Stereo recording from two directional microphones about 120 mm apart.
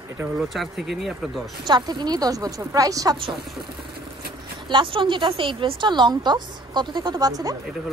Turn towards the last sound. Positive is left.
turn(degrees=-30)  # may be behind; listen again after turning